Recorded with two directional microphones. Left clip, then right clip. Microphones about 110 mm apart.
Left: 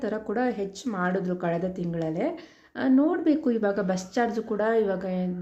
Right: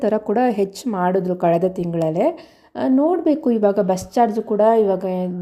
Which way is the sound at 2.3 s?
50° right (ahead or behind).